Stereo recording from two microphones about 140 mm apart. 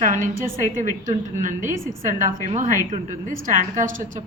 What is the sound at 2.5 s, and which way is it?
A woman's voice, 60° right (ahead or behind).